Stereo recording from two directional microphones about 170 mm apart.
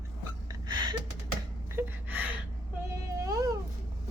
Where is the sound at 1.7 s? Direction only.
10° right (ahead or behind).